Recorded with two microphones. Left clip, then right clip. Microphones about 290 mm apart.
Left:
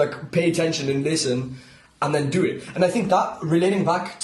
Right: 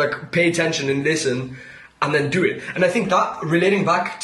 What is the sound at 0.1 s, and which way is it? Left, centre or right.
Speech, centre.